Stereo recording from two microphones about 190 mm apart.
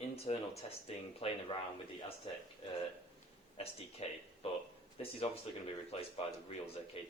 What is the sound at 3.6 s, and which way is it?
Speech, 30° left (ahead or behind).